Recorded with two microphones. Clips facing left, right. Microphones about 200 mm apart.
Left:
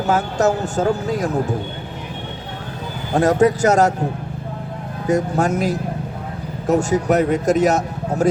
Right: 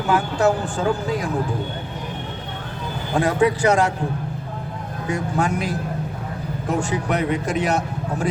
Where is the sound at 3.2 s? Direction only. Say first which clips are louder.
Left 4 dB; 40° left (ahead or behind).